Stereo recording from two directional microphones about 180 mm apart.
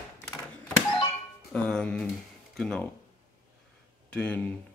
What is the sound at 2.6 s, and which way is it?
Speech, 5° left (ahead or behind).